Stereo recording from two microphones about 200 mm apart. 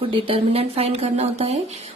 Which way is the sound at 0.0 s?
25° right (ahead or behind).